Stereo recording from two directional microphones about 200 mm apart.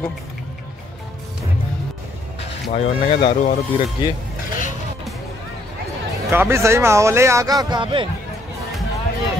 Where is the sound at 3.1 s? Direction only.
30° left (ahead or behind).